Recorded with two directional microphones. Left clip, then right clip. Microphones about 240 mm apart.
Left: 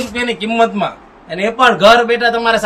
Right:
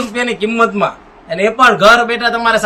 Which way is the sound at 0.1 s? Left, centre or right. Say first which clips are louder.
Right 1 dB; centre.